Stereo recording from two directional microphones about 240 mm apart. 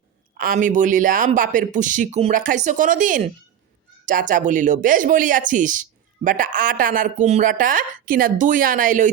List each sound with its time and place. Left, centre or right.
0.3 s speech: right